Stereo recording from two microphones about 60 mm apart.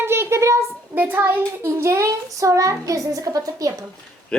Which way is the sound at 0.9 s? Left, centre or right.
Right.